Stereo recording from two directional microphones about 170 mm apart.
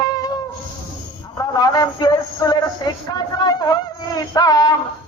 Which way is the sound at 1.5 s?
25° left (ahead or behind).